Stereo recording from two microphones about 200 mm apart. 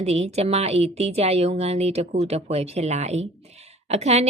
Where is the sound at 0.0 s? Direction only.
30° right (ahead or behind).